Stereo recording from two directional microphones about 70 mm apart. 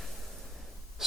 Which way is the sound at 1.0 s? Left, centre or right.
Centre.